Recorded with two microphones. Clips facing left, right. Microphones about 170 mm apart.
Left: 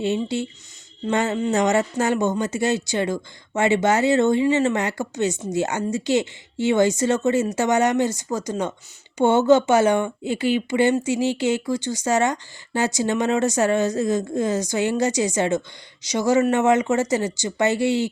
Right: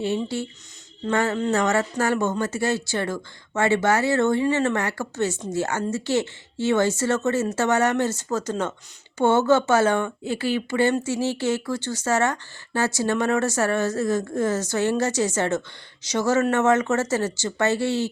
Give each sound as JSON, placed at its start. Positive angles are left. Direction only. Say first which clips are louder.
{"t": 0.0, "sound": "speech", "louder": "left 2 dB", "side_deg": 20}